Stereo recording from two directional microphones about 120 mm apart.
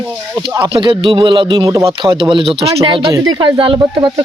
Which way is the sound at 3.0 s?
35° right (ahead or behind).